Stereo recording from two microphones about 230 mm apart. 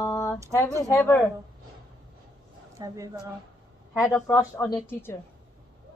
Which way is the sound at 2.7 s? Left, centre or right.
Centre.